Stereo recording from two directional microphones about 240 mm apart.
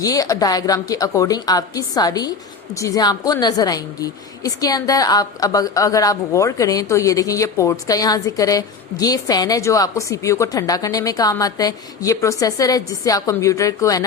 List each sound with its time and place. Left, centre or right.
0.0 s a woman's voice: centre